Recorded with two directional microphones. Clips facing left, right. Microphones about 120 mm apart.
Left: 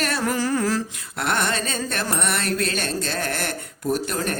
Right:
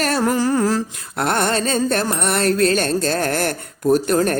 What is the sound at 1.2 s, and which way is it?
Music, 40° right (ahead or behind).